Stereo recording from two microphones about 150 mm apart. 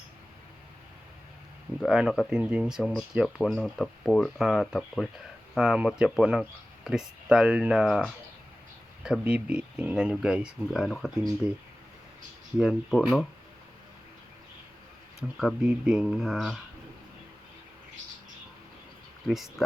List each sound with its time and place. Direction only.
1.8 s speech: 5° right (ahead or behind)
12.5 s speech: 5° right (ahead or behind)
15.4 s speech: centre (ahead or behind)
19.3 s speech: centre (ahead or behind)